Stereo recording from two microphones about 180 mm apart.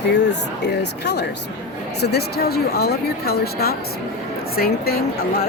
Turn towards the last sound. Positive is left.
turn(degrees=55)  # may be behind; listen again after turning